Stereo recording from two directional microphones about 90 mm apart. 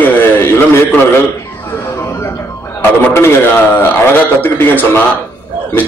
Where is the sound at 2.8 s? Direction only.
25° left (ahead or behind).